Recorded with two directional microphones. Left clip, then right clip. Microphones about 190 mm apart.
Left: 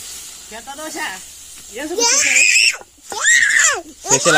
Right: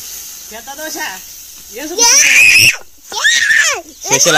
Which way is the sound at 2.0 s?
65° left (ahead or behind).